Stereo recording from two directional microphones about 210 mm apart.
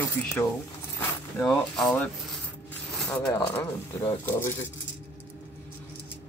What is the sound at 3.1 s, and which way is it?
Speech, 15° left (ahead or behind).